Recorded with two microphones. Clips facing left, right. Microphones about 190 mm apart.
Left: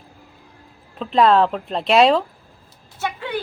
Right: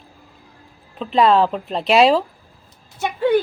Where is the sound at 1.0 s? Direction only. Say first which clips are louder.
Even; centre (ahead or behind).